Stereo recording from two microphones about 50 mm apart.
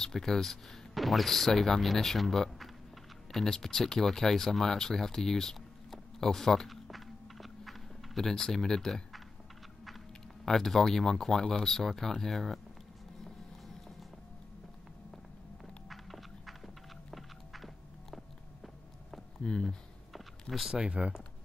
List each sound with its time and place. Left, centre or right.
0.0 s speech: centre
10.4 s speech: centre
15.9 s horse: centre
19.4 s speech: centre
20.1 s a sound: centre
20.7 s speech: right